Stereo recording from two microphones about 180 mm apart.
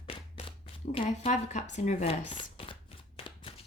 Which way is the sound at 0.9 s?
40° left (ahead or behind).